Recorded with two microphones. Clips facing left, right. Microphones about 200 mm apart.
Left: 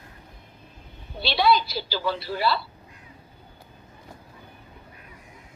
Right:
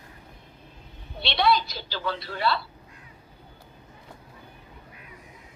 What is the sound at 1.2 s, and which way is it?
A woman's voice, centre (ahead or behind).